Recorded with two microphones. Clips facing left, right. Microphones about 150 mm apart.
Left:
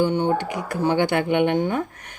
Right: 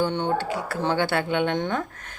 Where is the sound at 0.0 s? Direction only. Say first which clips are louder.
Left 4 dB; 10° left (ahead or behind).